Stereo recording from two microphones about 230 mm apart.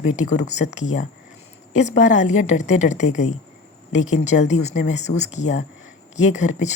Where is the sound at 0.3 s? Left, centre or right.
Left.